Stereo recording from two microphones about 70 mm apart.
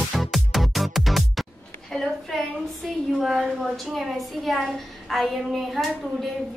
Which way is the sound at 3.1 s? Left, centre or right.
Centre.